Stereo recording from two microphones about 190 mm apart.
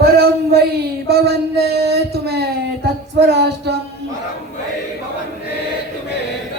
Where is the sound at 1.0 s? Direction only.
55° right (ahead or behind).